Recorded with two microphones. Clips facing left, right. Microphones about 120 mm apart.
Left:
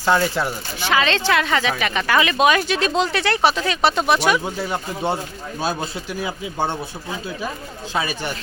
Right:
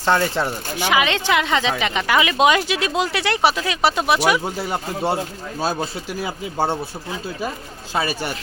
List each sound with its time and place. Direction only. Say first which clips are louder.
0.0 s speech: even; 5° left (ahead or behind)
0.8 s speech: even; 15° right (ahead or behind)